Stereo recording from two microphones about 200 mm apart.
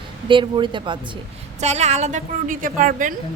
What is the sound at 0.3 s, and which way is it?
Speech, 25° right (ahead or behind).